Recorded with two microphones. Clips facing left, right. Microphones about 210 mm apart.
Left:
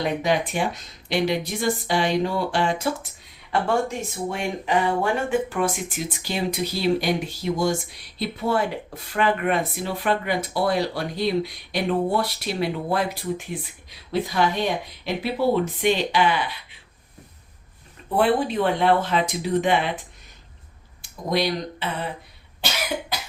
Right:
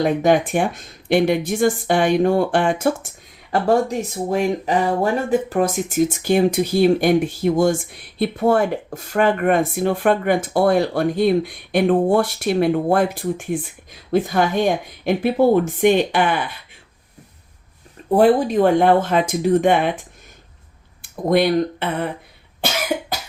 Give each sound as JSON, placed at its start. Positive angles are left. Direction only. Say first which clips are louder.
{"t": 0.0, "sound": "speech", "louder": "right 7 dB", "side_deg": -50}
{"t": 3.5, "sound": "speech", "louder": "right 5 dB", "side_deg": -40}
{"t": 18.1, "sound": "speech", "louder": "right 6 dB", "side_deg": -40}
{"t": 21.0, "sound": "speech", "louder": "right 7 dB", "side_deg": -55}